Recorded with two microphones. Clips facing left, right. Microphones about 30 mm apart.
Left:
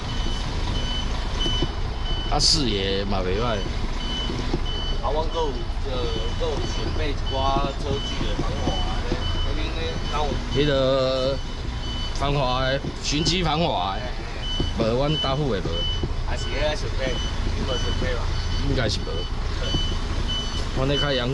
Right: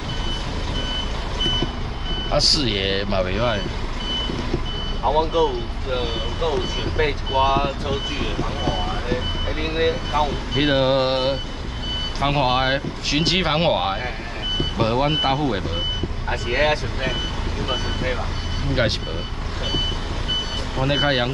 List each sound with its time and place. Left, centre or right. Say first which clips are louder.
0.7 s reversing beeps: right 5 dB; centre
2.3 s speech: right 3 dB; right
5.0 s speech: right 7 dB; right
5.9 s speech: right 3 dB; right
10.1 s speech: right 3 dB; right
16.3 s speech: right 7 dB; right
17.6 s speech: right 3 dB; right
20.2 s vehicle: right 5 dB; right